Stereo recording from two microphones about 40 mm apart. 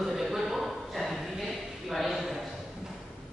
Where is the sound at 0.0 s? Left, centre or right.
Centre.